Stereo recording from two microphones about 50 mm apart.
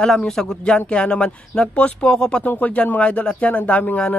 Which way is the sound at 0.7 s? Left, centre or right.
Left.